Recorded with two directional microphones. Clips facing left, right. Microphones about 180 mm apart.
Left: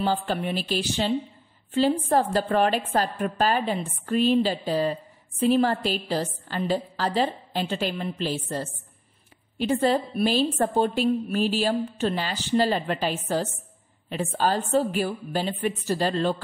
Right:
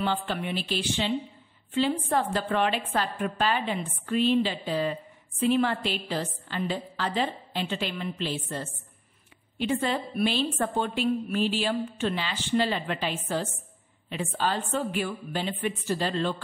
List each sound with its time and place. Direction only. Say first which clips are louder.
0.0 s a woman's voice: left 3 dB; 40° left (ahead or behind)